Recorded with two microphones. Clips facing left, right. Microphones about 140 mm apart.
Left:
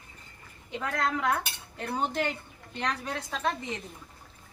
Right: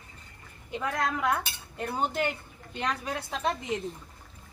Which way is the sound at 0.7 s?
5° right (ahead or behind).